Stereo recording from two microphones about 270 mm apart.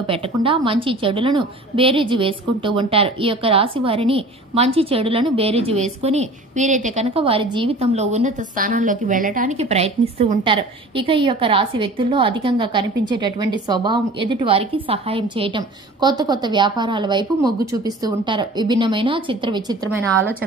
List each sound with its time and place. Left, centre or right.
0.0 s a woman's voice: centre